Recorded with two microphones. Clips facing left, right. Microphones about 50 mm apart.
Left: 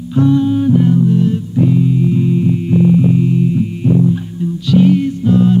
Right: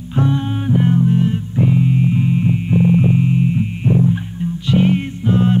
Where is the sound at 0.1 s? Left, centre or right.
Right.